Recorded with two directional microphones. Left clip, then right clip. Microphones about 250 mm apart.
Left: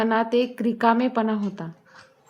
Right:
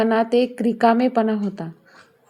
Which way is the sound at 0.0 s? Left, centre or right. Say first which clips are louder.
Right 3 dB; centre.